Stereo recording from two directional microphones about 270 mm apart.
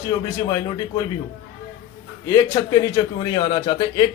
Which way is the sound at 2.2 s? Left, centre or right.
Centre.